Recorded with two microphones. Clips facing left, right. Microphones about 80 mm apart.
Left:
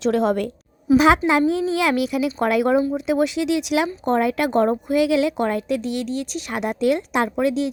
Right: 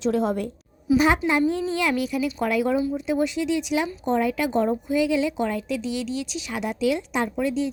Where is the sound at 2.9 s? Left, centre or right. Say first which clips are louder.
Left 4 dB; left.